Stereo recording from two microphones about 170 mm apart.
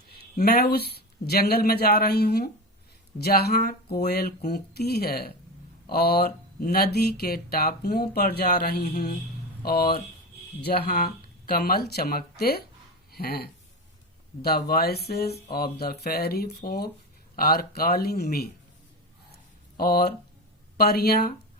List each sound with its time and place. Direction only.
0.4 s speech: 65° left (ahead or behind)
19.7 s speech: 65° left (ahead or behind)